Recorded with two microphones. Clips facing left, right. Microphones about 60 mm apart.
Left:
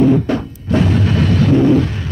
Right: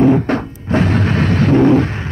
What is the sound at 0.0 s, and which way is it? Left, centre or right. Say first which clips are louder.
Music: right 1 dB; right.